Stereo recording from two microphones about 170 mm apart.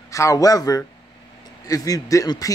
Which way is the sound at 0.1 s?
20° left (ahead or behind).